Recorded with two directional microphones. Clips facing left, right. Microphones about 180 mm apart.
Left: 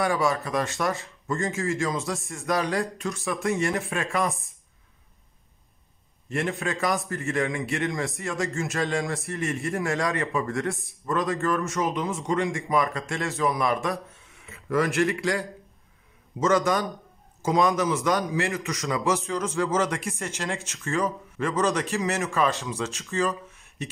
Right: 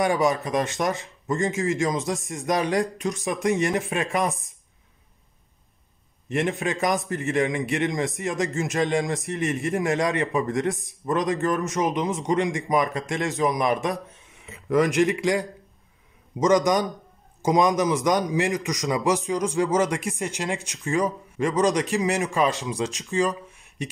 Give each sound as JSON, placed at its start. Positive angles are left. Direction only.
{"t": 0.0, "sound": "a man's voice", "side_deg": -20}
{"t": 6.2, "sound": "a man's voice", "side_deg": -20}